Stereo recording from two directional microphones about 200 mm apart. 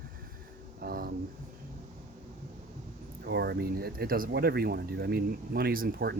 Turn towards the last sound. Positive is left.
turn(degrees=-45)  # may be behind; listen again after turning